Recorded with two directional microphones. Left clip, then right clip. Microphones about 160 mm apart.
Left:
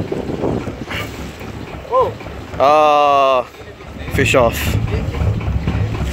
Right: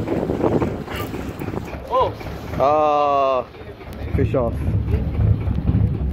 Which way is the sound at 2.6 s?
15° left (ahead or behind).